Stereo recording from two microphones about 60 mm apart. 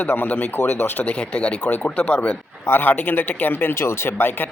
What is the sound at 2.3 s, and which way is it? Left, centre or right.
Speech, left.